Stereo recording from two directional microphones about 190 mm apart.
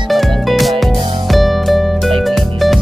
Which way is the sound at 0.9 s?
25° right (ahead or behind).